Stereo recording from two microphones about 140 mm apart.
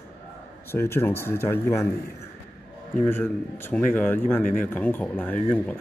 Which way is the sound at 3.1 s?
15° left (ahead or behind).